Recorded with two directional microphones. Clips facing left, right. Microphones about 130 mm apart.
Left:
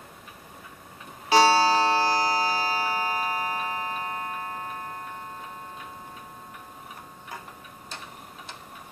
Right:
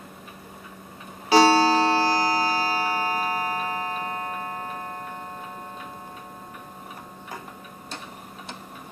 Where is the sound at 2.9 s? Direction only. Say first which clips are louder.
Right 2 dB; 15° left (ahead or behind).